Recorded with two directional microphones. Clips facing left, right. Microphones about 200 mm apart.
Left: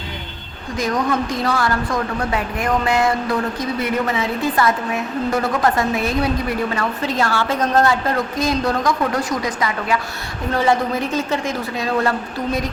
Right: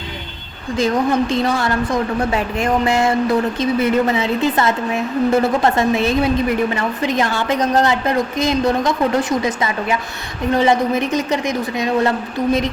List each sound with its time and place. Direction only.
0.8 s a woman's voice: 25° right (ahead or behind)